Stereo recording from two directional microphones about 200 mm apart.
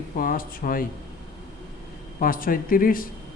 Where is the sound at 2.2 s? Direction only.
45° left (ahead or behind).